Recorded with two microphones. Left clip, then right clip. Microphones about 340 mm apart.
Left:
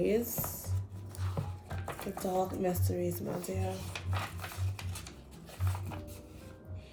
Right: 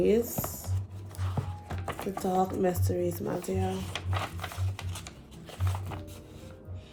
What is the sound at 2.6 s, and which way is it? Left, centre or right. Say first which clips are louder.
Speech: right 5 dB; right.